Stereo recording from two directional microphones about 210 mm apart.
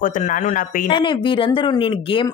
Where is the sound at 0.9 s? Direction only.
25° left (ahead or behind).